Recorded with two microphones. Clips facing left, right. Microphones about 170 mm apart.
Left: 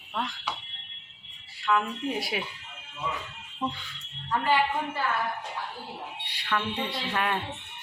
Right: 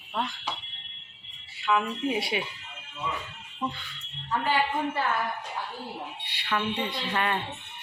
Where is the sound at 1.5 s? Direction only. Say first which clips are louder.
Even; 5° right (ahead or behind).